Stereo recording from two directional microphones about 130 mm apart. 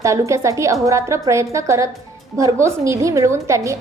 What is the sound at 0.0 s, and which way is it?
A woman's voice, 25° right (ahead or behind).